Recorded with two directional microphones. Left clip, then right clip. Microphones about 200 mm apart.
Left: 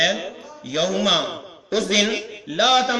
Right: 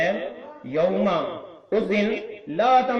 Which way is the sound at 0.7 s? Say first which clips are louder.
Left 2 dB; centre (ahead or behind).